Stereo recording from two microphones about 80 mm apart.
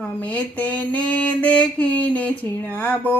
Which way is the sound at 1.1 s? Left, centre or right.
Centre.